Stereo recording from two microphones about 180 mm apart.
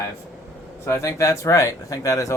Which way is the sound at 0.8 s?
15° left (ahead or behind).